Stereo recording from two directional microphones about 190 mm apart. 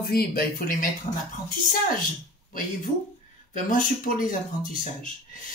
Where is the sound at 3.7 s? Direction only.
45° left (ahead or behind).